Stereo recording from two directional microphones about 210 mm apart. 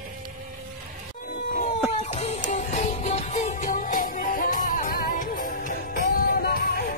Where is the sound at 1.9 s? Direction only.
30° left (ahead or behind).